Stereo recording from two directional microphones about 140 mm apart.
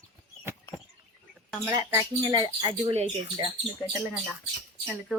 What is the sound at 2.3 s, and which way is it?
Speech, 35° right (ahead or behind).